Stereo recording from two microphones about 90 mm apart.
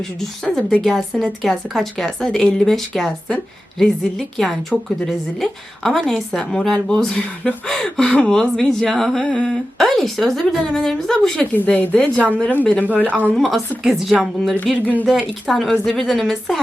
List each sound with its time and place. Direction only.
0.0 s a woman's voice: 5° left (ahead or behind)
11.5 s speech: 20° left (ahead or behind)
13.3 s a woman's voice: centre (ahead or behind)